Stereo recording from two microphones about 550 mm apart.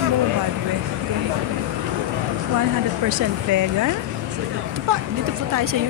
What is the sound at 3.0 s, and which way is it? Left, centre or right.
Speech, right.